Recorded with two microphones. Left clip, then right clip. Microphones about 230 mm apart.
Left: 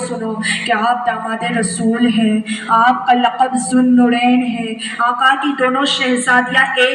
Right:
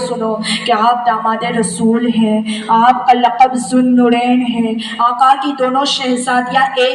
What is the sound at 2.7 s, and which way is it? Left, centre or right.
A woman's voice, left.